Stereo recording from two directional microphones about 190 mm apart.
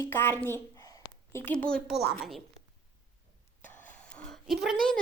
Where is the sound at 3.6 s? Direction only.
10° left (ahead or behind).